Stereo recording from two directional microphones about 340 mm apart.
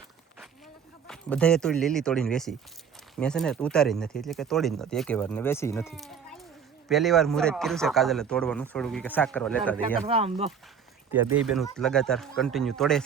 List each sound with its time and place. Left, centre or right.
1.0 s speech: centre
10.1 s speech: centre
11.1 s speech: centre